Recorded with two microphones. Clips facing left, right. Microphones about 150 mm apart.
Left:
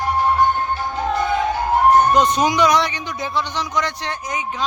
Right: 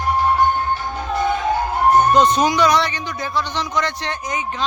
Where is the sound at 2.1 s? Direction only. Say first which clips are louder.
Right 1 dB; 15° left (ahead or behind).